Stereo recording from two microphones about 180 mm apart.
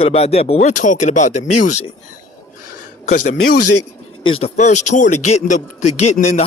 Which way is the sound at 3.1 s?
45° left (ahead or behind).